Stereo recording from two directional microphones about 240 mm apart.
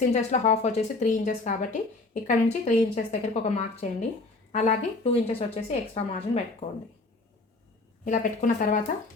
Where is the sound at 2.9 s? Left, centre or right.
Left.